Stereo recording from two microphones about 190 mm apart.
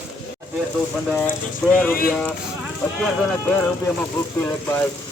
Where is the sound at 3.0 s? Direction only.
5° left (ahead or behind).